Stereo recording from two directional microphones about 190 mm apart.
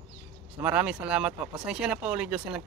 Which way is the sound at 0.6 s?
5° right (ahead or behind).